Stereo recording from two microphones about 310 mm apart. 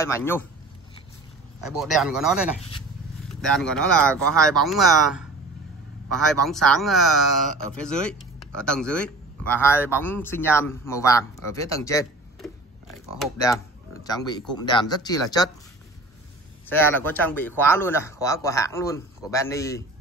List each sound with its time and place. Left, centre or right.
0.0 s a man's voice: centre
1.6 s a man's voice: centre
14.0 s a man's voice: centre
16.6 s a man's voice: centre